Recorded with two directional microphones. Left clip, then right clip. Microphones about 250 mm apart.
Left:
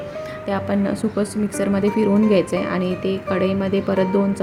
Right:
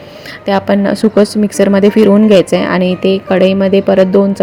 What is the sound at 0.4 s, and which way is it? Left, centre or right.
A woman's voice, right.